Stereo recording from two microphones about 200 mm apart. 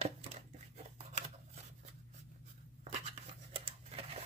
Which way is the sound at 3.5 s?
30° right (ahead or behind).